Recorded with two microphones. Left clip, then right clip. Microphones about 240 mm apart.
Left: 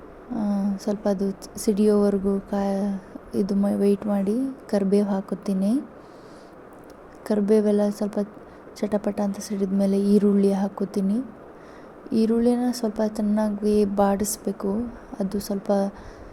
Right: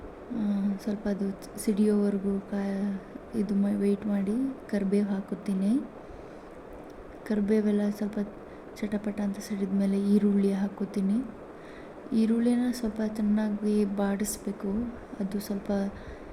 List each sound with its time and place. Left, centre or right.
0.3 s speech: left
7.3 s speech: left